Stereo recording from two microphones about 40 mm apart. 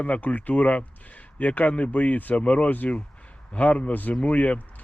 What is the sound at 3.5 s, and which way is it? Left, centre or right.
A man's voice, left.